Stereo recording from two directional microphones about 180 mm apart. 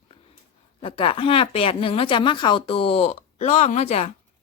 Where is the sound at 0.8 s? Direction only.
30° left (ahead or behind).